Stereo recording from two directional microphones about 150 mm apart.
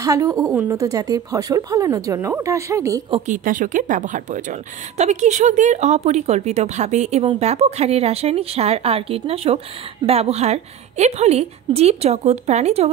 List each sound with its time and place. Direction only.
0.0 s speech: 20° right (ahead or behind)
3.3 s a woman's voice: 60° right (ahead or behind); by 12.9 s 45° right (ahead or behind)